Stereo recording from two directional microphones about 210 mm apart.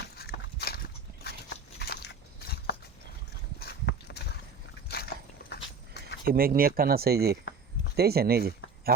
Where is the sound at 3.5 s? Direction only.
50° left (ahead or behind).